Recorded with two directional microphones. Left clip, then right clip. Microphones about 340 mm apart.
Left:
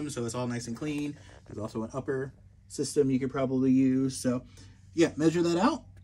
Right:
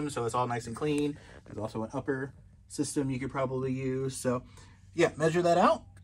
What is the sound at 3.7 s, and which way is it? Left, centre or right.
Speech, centre.